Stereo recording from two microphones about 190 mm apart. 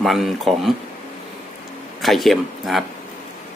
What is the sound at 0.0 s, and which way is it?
Speech, centre (ahead or behind).